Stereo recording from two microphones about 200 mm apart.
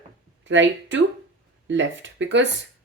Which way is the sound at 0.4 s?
65° right (ahead or behind).